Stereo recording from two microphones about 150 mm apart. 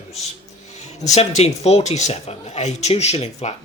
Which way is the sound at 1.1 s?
45° left (ahead or behind).